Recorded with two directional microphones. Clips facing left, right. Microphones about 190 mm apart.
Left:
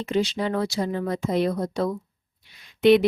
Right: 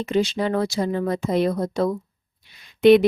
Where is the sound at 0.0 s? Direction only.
50° right (ahead or behind).